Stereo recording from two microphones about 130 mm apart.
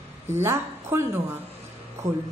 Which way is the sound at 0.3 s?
20° right (ahead or behind).